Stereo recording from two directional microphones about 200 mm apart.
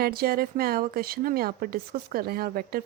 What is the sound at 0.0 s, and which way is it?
Speech, 50° right (ahead or behind).